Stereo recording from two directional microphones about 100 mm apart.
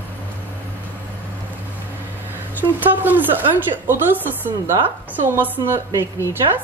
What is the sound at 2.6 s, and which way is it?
A woman's voice, 20° right (ahead or behind).